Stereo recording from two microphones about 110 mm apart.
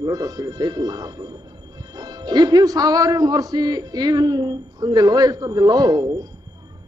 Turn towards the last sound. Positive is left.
turn(degrees=-35)  # may be behind; listen again after turning